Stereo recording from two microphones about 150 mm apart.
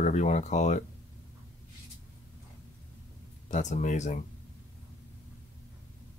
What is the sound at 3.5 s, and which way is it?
Speech, 55° left (ahead or behind).